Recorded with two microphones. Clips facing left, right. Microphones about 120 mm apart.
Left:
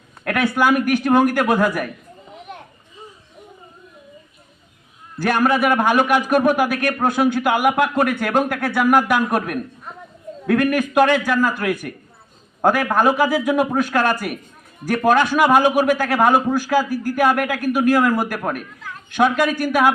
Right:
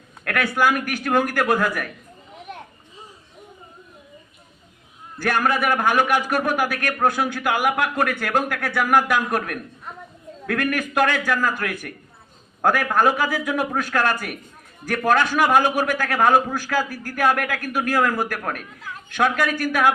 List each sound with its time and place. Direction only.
0.3 s a man's voice: 20° left (ahead or behind)
5.2 s a man's voice: 20° left (ahead or behind)